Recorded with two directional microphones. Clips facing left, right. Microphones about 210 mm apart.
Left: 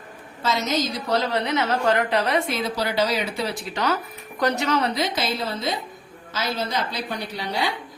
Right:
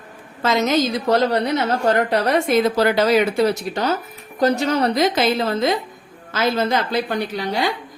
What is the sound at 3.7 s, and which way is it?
Speech, 30° right (ahead or behind).